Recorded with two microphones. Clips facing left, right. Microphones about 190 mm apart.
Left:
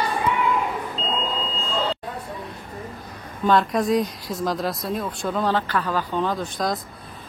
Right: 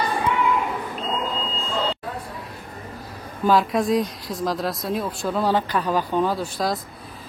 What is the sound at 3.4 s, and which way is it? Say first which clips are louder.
Speech: even; centre (ahead or behind).